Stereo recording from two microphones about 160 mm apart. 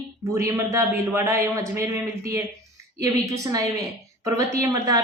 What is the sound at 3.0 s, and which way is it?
A woman's voice, 20° right (ahead or behind).